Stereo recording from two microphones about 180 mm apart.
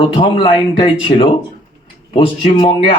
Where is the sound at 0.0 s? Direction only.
30° left (ahead or behind).